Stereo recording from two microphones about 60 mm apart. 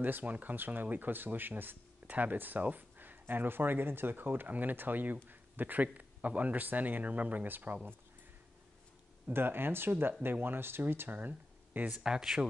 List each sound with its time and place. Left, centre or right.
0.0 s speech: right
9.3 s speech: right
12.0 s speech: centre